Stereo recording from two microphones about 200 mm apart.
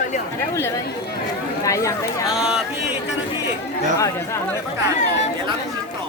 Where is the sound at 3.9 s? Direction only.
15° left (ahead or behind).